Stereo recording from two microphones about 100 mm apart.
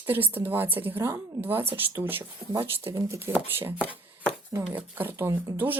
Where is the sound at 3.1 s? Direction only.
20° right (ahead or behind).